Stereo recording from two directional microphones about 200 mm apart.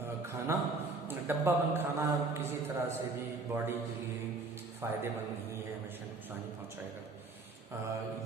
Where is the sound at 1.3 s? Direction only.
10° right (ahead or behind).